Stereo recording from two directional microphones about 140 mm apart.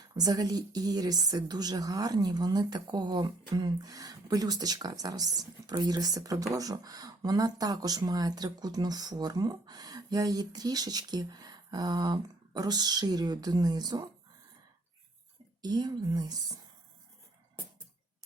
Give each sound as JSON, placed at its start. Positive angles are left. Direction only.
{"t": 0.1, "sound": "a woman's voice", "side_deg": -30}
{"t": 15.6, "sound": "a woman's voice", "side_deg": -30}